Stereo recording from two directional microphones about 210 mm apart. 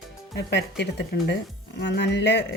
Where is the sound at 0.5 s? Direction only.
55° left (ahead or behind).